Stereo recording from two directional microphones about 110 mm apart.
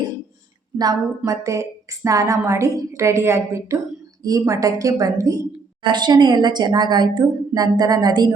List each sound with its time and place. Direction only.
0.8 s a woman's voice: 35° right (ahead or behind)
5.8 s a woman's voice: 45° right (ahead or behind)